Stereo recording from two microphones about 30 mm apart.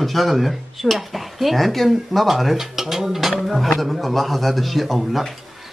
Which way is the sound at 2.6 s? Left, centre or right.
Centre.